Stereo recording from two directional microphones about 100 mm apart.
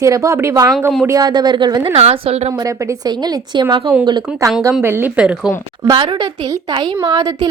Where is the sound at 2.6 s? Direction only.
40° right (ahead or behind).